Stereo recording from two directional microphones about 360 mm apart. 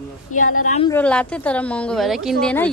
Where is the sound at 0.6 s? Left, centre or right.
Centre.